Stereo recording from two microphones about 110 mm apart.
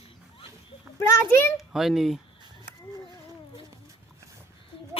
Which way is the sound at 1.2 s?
25° left (ahead or behind).